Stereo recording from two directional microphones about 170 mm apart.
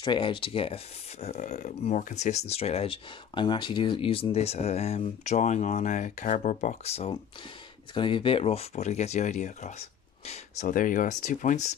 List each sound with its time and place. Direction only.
0.0 s speech: 30° left (ahead or behind)